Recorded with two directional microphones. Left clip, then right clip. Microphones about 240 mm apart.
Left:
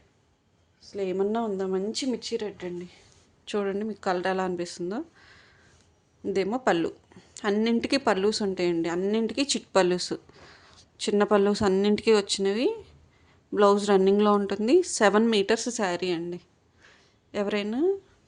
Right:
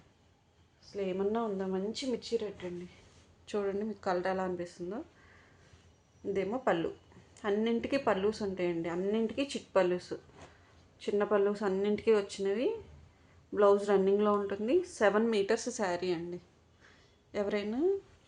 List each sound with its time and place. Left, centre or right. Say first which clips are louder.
0.8 s a woman's voice: left 6 dB; left
3.4 s a woman's voice: left 5 dB; left
6.2 s a woman's voice: left 6 dB; left
16.8 s a sound: left 5 dB; left